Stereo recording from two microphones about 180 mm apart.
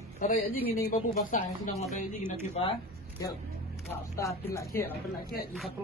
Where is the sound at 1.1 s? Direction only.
40° left (ahead or behind).